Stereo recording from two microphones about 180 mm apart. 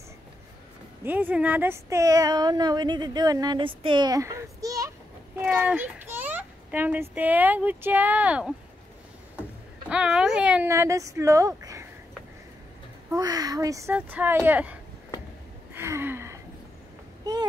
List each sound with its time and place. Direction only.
1.0 s speech: 10° right (ahead or behind)
9.8 s speech: 5° right (ahead or behind)
13.1 s speech: 20° right (ahead or behind)
15.7 s a sound: 15° right (ahead or behind)